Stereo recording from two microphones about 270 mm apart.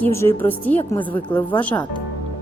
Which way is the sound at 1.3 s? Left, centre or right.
Centre.